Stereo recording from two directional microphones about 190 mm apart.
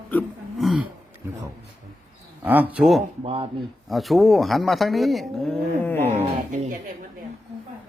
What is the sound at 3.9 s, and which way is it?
Speech, centre (ahead or behind).